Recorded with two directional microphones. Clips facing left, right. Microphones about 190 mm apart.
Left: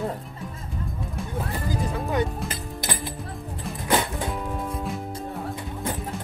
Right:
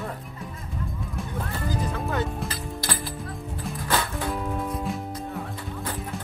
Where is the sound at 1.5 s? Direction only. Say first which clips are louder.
Even; 15° left (ahead or behind).